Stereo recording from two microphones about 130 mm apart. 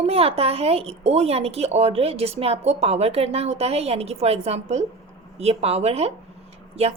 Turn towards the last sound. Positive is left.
turn(degrees=-55)  # may be behind; listen again after turning